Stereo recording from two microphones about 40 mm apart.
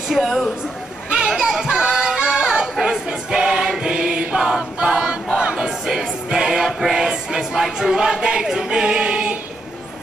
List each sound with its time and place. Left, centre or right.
0.1 s a woman's voice: centre
1.1 s children playing: centre
1.6 s music: centre
2.8 s choir: centre
6.8 s a sound: centre